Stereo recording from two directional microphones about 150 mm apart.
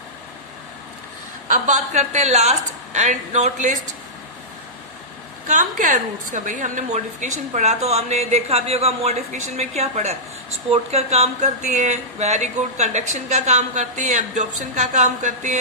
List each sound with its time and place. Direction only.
1.5 s speech: 50° right (ahead or behind)
5.5 s speech: 60° right (ahead or behind)